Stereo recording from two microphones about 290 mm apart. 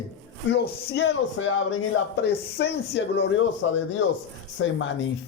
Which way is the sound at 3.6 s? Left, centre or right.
Left.